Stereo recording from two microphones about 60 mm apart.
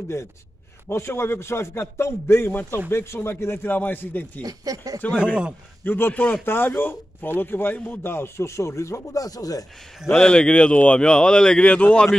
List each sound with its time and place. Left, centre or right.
0.8 s a man's voice: left
4.4 s speech: right
5.1 s speech: centre
5.9 s a man's voice: left
10.1 s speech: centre